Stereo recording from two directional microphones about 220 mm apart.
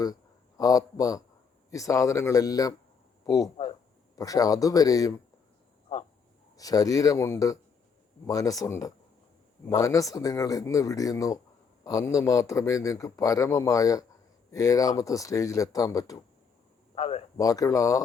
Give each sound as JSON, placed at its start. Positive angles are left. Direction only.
{"t": 0.0, "sound": "a man's voice", "side_deg": 15}
{"t": 6.6, "sound": "a man's voice", "side_deg": 15}
{"t": 16.9, "sound": "a sound", "side_deg": 25}
{"t": 17.3, "sound": "a man's voice", "side_deg": 15}